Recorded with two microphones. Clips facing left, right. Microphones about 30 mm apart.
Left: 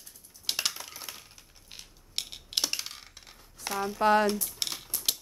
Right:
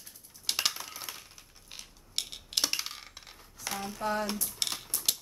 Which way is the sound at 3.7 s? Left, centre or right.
Left.